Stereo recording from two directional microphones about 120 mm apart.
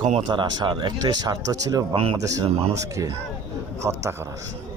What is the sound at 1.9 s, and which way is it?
Speech, 55° right (ahead or behind).